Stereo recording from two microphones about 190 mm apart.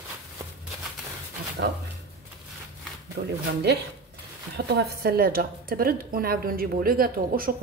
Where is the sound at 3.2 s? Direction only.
60° right (ahead or behind).